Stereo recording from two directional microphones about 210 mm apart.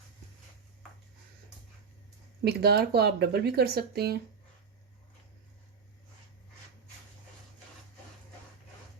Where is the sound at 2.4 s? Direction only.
50° right (ahead or behind).